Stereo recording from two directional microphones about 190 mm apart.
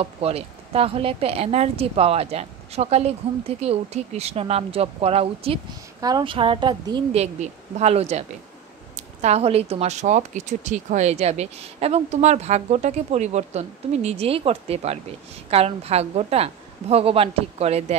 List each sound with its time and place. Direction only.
0.0 s speech: 30° right (ahead or behind)
5.9 s a woman's voice: 20° right (ahead or behind)
7.3 s speech: 35° right (ahead or behind)